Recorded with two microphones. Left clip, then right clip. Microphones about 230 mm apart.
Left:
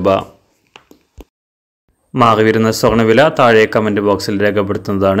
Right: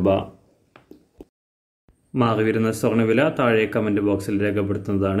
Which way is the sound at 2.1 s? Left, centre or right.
Centre.